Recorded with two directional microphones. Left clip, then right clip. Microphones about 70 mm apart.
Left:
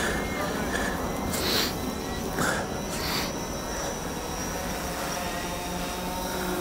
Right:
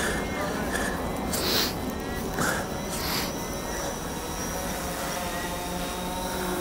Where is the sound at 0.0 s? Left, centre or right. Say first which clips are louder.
Even; centre.